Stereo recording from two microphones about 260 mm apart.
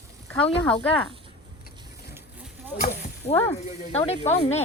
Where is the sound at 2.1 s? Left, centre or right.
Centre.